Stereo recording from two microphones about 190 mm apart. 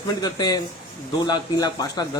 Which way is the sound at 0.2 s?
20° left (ahead or behind).